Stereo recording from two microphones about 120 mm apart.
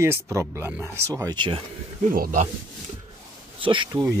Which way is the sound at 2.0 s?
90° right.